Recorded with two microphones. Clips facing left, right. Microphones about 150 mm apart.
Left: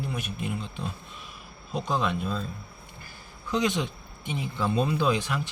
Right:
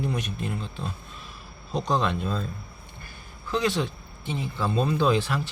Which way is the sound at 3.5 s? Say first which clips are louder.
Right 1 dB; 20° left (ahead or behind).